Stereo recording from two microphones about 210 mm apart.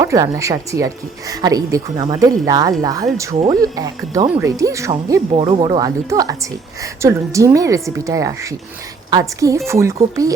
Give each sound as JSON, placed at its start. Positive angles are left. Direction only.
{"t": 0.0, "sound": "speech", "side_deg": -15}